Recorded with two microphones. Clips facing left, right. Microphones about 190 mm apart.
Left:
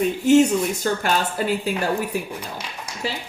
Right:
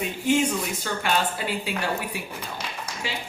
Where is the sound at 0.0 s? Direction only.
45° left (ahead or behind).